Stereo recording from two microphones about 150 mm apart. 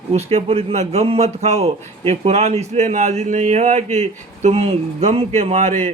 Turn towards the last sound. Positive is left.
turn(degrees=-45)  # may be behind; listen again after turning